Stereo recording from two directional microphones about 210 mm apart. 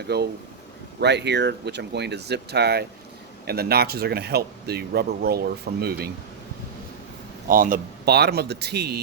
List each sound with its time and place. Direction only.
0.1 s speech: 50° right (ahead or behind)
7.4 s speech: 40° right (ahead or behind)